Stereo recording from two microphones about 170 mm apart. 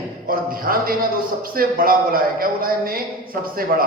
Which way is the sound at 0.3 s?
60° right (ahead or behind).